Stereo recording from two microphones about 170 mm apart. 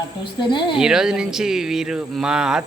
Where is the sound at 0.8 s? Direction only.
5° right (ahead or behind).